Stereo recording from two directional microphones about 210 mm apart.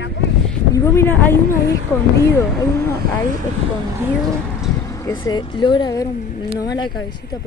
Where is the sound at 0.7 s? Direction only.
15° left (ahead or behind).